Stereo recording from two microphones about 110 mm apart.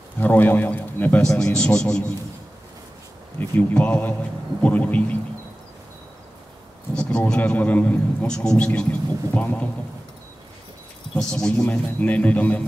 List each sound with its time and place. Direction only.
0.2 s a man's voice: 15° left (ahead or behind)
3.3 s a man's voice: 15° left (ahead or behind)
7.0 s a man's voice: 10° left (ahead or behind)
11.1 s a man's voice: 5° left (ahead or behind)